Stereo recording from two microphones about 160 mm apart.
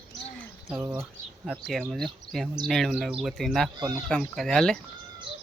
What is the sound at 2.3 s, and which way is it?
Speech, centre (ahead or behind).